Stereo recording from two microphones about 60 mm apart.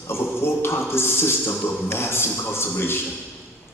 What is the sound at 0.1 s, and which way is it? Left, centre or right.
A man's voice, left.